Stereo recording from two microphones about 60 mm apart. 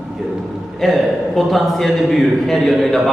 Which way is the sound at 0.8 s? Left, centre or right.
Centre.